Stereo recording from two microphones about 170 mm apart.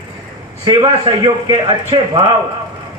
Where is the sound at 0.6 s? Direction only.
25° right (ahead or behind).